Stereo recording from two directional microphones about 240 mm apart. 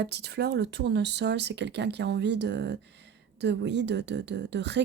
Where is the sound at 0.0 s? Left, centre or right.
Right.